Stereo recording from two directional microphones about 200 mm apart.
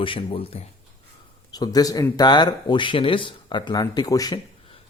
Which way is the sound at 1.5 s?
20° left (ahead or behind).